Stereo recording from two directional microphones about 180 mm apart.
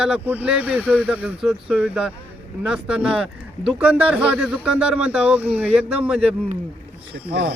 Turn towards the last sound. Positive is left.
turn(degrees=-65)  # may be behind; listen again after turning